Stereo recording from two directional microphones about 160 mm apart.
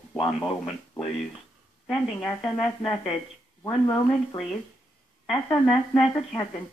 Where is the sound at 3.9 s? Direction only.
30° left (ahead or behind).